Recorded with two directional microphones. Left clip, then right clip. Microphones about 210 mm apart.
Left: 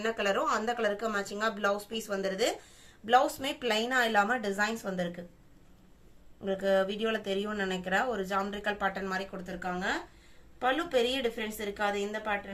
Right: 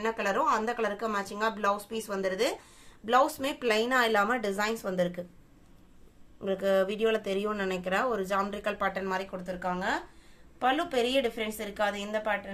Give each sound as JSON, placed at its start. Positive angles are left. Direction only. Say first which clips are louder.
{"t": 0.0, "sound": "speech", "louder": "right 1 dB", "side_deg": -20}
{"t": 6.4, "sound": "a woman's voice", "louder": "right 1 dB", "side_deg": -30}